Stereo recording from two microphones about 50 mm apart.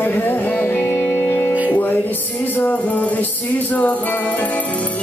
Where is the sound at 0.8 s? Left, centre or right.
Left.